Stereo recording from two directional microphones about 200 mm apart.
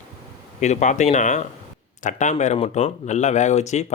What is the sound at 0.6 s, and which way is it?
Speech, 35° left (ahead or behind).